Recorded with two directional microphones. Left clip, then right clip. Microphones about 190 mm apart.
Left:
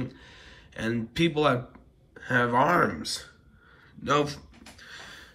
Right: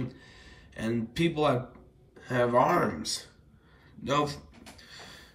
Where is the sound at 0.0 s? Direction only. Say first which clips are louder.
Left 2 dB; 5° right (ahead or behind).